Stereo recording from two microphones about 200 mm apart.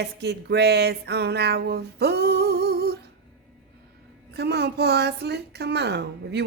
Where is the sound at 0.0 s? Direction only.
55° right (ahead or behind).